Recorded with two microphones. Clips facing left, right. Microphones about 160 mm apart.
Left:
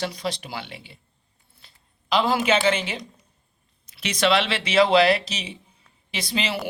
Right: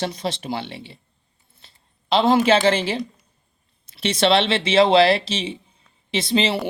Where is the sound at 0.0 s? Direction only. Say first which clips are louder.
Right 3 dB; 25° right (ahead or behind).